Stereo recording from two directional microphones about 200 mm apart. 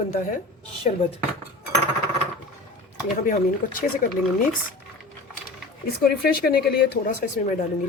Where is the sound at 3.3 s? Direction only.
40° left (ahead or behind).